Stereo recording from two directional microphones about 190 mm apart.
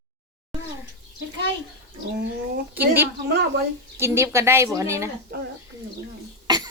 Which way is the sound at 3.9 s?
15° right (ahead or behind).